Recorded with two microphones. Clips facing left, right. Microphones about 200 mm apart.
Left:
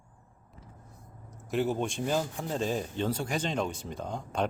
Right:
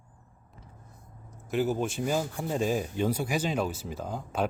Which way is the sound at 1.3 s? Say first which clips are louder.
Right 1 dB; centre (ahead or behind).